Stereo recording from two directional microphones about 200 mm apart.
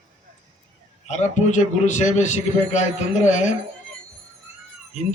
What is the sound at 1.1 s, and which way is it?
A man's voice, 35° left (ahead or behind).